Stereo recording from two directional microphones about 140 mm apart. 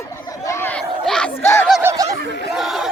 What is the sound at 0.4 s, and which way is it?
Chatter, 15° left (ahead or behind).